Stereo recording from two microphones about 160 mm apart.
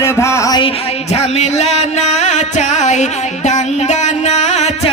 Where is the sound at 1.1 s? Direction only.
45° left (ahead or behind).